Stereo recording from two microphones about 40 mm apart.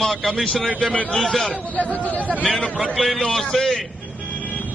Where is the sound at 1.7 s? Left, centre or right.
Left.